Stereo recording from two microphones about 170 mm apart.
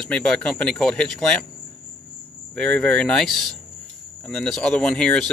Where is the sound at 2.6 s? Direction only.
5° left (ahead or behind).